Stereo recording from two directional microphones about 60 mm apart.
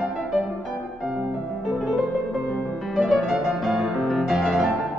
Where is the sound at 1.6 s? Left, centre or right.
Centre.